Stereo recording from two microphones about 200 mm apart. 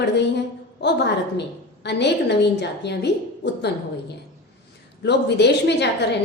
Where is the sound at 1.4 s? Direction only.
60° left (ahead or behind).